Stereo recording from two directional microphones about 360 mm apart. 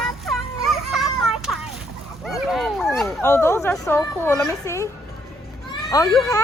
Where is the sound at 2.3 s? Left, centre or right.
Centre.